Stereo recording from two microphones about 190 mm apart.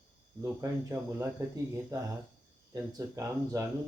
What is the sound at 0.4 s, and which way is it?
Speech, 15° right (ahead or behind).